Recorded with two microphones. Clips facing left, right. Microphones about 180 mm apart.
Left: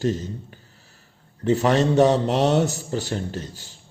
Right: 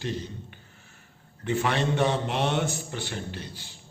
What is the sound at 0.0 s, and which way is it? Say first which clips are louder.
A man's voice: left 8 dB; 45° left (ahead or behind).